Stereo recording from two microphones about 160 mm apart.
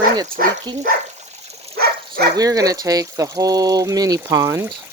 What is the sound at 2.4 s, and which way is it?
Speech, 20° right (ahead or behind).